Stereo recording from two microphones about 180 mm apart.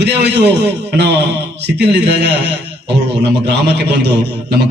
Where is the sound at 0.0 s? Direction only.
70° right (ahead or behind).